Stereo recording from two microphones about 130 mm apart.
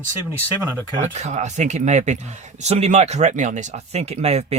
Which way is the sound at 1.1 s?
60° right (ahead or behind).